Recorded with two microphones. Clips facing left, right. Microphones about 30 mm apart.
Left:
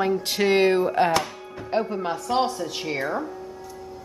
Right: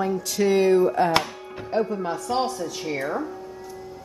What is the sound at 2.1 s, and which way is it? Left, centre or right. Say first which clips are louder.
Speech: left 1 dB; centre.